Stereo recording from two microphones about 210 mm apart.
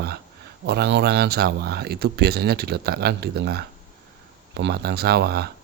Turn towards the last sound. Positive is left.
turn(degrees=-50)  # may be behind; listen again after turning